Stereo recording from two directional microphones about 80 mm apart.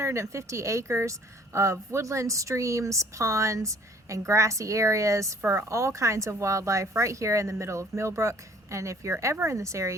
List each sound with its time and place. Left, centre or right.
0.0 s speech: right